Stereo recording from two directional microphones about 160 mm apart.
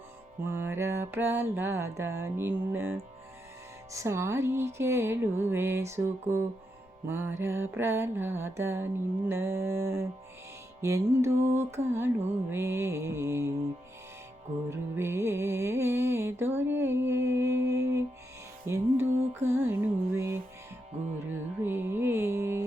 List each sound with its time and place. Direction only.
0.5 s music: 15° right (ahead or behind)
14.7 s music: 15° right (ahead or behind)